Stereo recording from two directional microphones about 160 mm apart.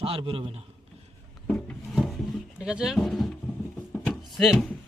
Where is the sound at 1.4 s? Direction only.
10° left (ahead or behind).